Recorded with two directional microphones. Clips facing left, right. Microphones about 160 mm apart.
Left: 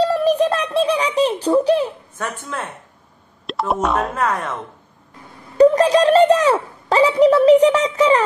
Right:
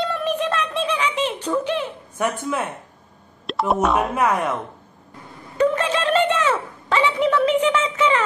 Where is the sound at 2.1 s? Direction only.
10° right (ahead or behind).